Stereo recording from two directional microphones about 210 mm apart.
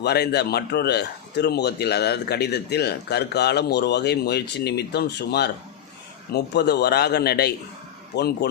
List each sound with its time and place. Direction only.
0.0 s speech: 50° left (ahead or behind)